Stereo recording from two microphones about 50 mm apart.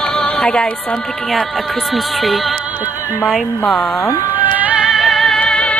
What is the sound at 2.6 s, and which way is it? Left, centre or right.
Music, right.